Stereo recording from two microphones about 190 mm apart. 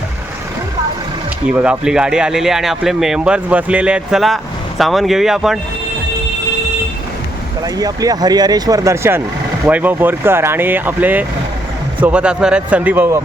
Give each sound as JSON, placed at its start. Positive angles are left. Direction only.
{"t": 1.5, "sound": "speech", "side_deg": -5}
{"t": 7.6, "sound": "speech", "side_deg": -20}